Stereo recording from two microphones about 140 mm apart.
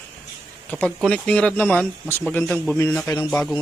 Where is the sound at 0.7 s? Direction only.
10° left (ahead or behind).